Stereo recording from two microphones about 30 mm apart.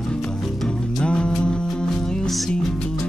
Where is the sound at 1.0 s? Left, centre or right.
Left.